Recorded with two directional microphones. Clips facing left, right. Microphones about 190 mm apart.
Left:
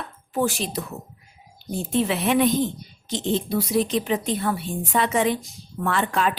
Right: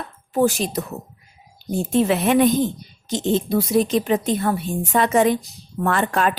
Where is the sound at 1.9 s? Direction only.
45° right (ahead or behind).